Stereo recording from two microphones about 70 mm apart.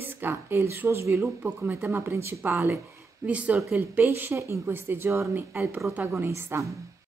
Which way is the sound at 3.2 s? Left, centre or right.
Centre.